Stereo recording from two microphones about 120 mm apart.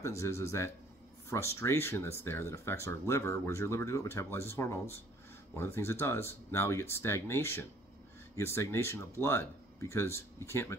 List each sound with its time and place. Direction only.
0.0 s speech: 25° left (ahead or behind)